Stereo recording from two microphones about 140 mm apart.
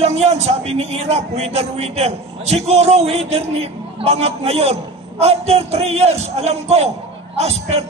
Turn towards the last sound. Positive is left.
turn(degrees=-50)  # may be behind; listen again after turning